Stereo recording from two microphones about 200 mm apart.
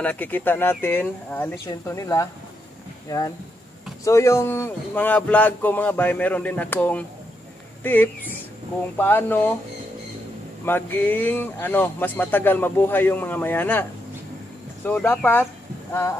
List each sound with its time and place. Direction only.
0.0 s speech: 10° left (ahead or behind)
4.0 s speech: 15° left (ahead or behind)
10.6 s speech: 10° left (ahead or behind)
14.9 s speech: 10° left (ahead or behind)